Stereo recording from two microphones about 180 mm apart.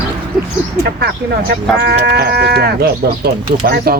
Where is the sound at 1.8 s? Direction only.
60° right (ahead or behind).